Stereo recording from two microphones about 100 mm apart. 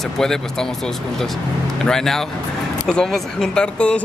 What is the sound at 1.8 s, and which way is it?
Speech, 5° left (ahead or behind).